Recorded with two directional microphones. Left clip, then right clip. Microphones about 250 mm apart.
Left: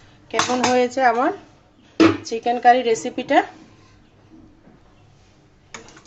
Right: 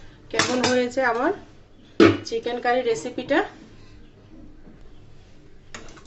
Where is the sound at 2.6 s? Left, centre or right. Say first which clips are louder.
Left 8 dB; left.